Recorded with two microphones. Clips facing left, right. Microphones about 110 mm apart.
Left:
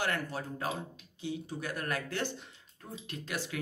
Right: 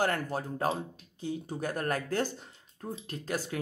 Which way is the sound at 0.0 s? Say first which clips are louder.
Right 4 dB; 45° right (ahead or behind).